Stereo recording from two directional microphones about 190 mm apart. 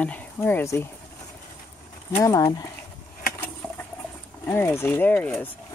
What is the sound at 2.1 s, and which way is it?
Speech, 15° left (ahead or behind).